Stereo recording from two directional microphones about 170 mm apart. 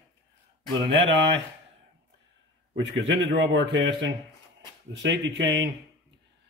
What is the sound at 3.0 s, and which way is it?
Speech, 90° right.